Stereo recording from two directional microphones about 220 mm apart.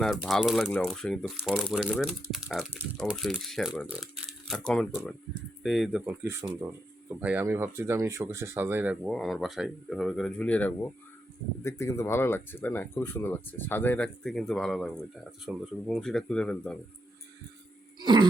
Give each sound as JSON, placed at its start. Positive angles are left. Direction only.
{"t": 0.0, "sound": "speech", "side_deg": 0}
{"t": 18.0, "sound": "music", "side_deg": -20}